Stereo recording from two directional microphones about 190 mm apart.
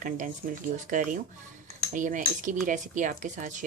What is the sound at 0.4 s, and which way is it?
Cutlery, 50° right (ahead or behind).